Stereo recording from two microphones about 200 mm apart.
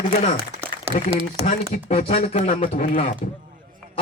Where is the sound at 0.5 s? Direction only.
30° right (ahead or behind).